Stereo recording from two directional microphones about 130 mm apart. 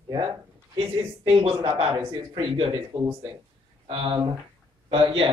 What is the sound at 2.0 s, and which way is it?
Speech, 35° right (ahead or behind).